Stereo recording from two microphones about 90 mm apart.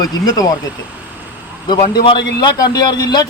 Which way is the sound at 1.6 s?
60° left (ahead or behind).